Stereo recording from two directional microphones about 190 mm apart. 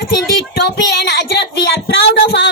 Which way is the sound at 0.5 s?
65° left (ahead or behind).